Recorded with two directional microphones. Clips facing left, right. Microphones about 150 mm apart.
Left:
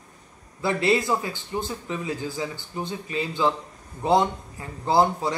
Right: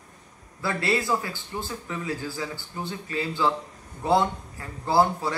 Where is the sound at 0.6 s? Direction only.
20° left (ahead or behind).